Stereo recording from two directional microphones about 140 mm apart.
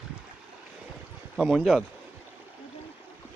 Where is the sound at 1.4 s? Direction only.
5° right (ahead or behind).